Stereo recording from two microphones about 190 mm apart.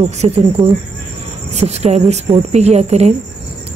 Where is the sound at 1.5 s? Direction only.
35° right (ahead or behind).